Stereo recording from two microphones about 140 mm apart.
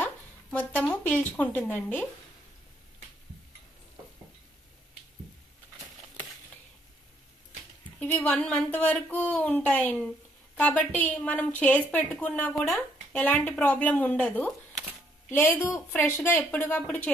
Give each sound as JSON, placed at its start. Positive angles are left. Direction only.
{"t": 0.0, "sound": "a sound", "side_deg": 10}
{"t": 0.8, "sound": "a woman's voice", "side_deg": 10}
{"t": 8.2, "sound": "a woman's voice", "side_deg": 10}